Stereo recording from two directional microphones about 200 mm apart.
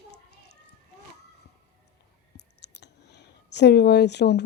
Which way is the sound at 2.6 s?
60° left (ahead or behind).